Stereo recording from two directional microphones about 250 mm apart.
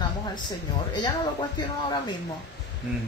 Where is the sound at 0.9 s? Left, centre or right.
Centre.